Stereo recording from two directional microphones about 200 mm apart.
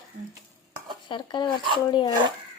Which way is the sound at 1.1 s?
25° left (ahead or behind).